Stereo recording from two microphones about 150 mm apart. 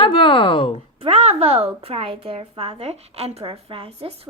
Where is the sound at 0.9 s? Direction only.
40° right (ahead or behind).